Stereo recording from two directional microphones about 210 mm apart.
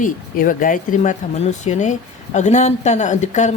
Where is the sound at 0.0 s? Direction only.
40° left (ahead or behind).